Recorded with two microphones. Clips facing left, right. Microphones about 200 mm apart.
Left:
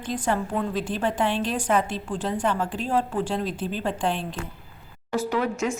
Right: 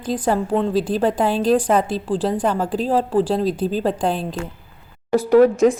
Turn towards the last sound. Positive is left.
turn(degrees=-40)  # may be behind; listen again after turning